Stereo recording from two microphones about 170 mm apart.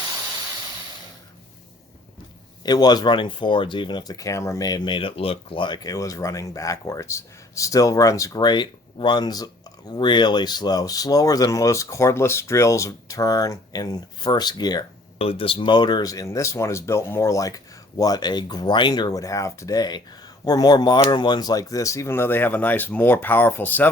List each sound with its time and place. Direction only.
2.6 s speech: 25° left (ahead or behind)